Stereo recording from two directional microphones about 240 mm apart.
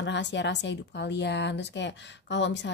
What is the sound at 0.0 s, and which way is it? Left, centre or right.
Speech, left.